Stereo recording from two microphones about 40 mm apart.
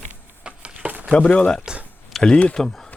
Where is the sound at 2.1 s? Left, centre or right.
Centre.